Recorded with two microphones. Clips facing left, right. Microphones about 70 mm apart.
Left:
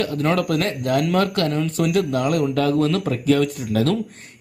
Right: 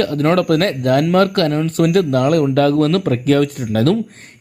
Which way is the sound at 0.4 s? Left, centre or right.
Right.